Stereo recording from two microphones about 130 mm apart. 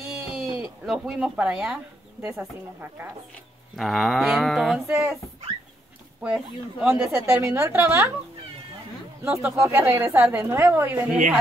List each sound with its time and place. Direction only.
0.0 s a sound: 5° right (ahead or behind)
2.2 s a woman's voice: 15° right (ahead or behind)
3.7 s a sound: centre (ahead or behind)
4.8 s a woman's voice: 15° right (ahead or behind)
6.3 s a woman's voice: 10° right (ahead or behind)
9.2 s a woman's voice: 10° right (ahead or behind)